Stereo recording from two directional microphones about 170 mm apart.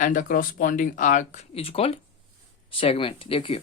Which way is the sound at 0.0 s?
50° left (ahead or behind).